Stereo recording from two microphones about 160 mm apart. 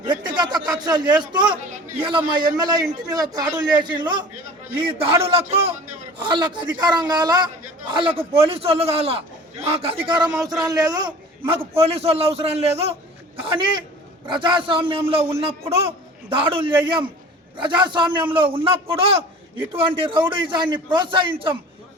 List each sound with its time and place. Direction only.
0.0 s a man's voice: 30° right (ahead or behind)